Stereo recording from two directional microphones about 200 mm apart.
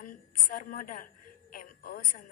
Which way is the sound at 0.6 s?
40° left (ahead or behind).